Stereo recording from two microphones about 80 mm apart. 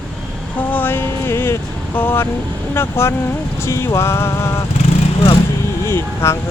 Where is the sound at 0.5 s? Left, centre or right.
Left.